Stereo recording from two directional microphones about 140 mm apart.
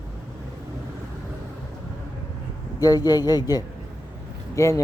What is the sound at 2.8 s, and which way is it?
A man's voice, 25° left (ahead or behind).